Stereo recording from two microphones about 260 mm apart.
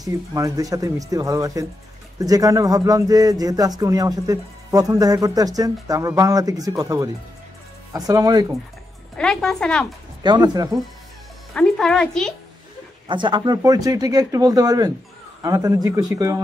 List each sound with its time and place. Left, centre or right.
0.0 s speech: centre
9.1 s speech: centre
10.2 s speech: centre
11.5 s speech: centre
13.1 s speech: centre